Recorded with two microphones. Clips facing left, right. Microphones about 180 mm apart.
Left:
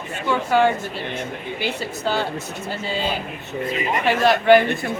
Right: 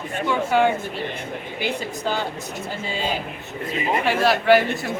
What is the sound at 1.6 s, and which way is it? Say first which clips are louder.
Speech: even; 15° right (ahead or behind).